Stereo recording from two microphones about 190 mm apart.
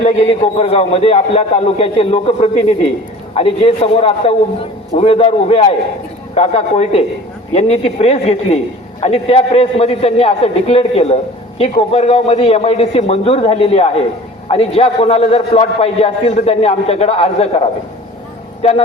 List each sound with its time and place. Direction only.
0.0 s a man's voice: 35° left (ahead or behind)